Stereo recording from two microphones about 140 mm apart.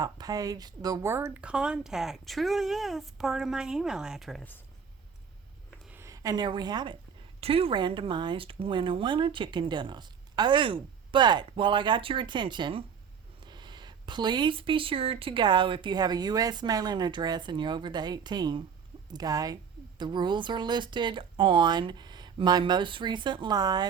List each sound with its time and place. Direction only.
0.0 s speech: 25° right (ahead or behind); by 4.4 s centre (ahead or behind)
5.9 s a woman's voice: 20° right (ahead or behind)
7.4 s speech: 40° right (ahead or behind)